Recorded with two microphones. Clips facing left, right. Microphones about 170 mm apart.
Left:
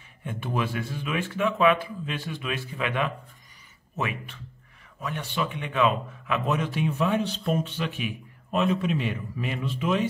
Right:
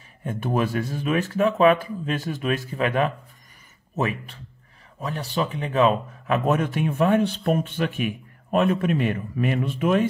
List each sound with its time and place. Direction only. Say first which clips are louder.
0.2 s a man's voice: right 5 dB; 40° right (ahead or behind)